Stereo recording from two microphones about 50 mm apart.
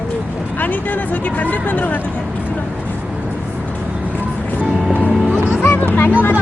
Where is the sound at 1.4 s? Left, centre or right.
Left.